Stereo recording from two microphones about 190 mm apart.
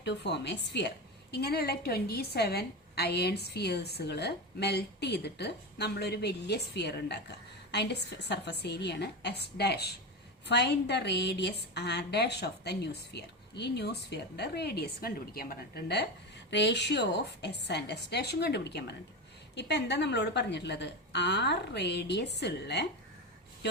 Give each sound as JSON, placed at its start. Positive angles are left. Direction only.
{"t": 0.0, "sound": "a woman's voice", "side_deg": 65}